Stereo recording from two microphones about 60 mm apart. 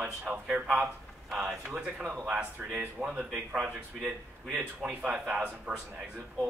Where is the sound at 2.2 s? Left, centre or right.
Centre.